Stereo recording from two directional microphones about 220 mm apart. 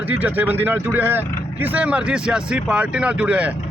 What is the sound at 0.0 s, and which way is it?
Speech, 5° right (ahead or behind).